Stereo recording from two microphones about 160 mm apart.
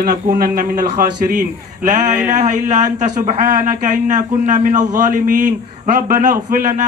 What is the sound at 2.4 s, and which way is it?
Speech, 50° right (ahead or behind).